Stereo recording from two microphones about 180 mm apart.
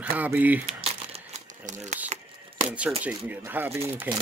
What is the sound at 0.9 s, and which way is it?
Crumpling, 35° right (ahead or behind).